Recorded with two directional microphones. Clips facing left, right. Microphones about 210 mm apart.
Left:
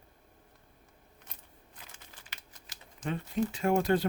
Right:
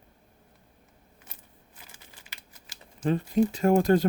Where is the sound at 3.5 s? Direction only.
40° right (ahead or behind).